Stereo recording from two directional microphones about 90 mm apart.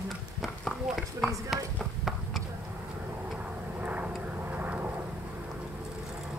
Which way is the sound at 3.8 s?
15° right (ahead or behind).